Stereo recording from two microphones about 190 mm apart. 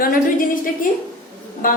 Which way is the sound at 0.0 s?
50° left (ahead or behind).